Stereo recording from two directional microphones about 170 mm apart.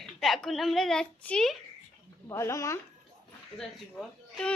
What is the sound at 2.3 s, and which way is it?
Speech, 15° left (ahead or behind).